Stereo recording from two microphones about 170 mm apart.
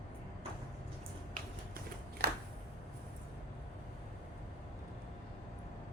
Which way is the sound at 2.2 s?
65° right (ahead or behind).